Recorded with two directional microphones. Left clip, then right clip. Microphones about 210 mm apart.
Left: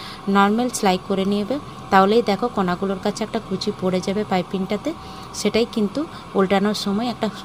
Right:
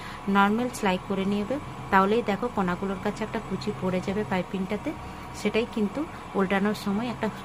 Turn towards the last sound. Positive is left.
turn(degrees=20)  # may be behind; listen again after turning